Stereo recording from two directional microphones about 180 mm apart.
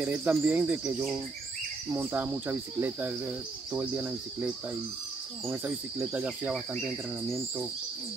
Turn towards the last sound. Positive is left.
turn(degrees=-5)  # may be behind; listen again after turning